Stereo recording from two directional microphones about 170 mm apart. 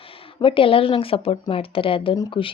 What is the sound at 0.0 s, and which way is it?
Speech, 30° left (ahead or behind).